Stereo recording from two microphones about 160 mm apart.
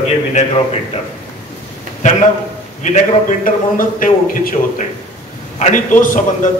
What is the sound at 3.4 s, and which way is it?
A man's voice, 60° left (ahead or behind).